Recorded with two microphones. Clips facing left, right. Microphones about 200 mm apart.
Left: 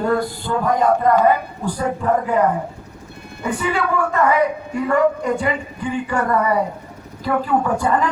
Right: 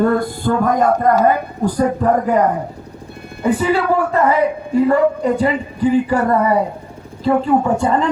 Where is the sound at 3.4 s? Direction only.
35° right (ahead or behind).